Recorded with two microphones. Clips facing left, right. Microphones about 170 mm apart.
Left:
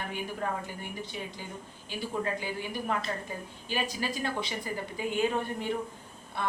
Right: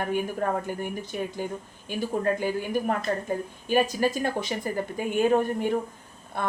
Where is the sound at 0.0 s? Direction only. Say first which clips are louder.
Right 8 dB; 50° right (ahead or behind).